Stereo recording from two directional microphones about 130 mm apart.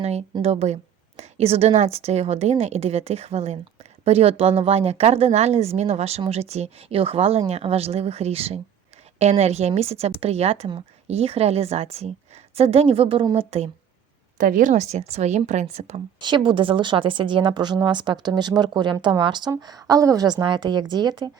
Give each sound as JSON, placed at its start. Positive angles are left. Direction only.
{"t": 0.0, "sound": "a woman's voice", "side_deg": -55}
{"t": 14.3, "sound": "a woman's voice", "side_deg": -90}
{"t": 16.2, "sound": "speech", "side_deg": -35}